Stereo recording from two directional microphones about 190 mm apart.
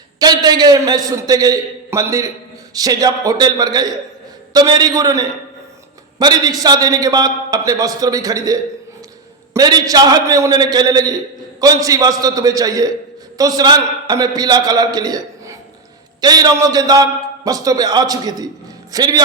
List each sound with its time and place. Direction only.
0.2 s a man's voice: 20° right (ahead or behind)